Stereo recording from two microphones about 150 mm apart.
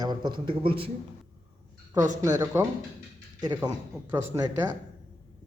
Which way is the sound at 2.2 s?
15° right (ahead or behind).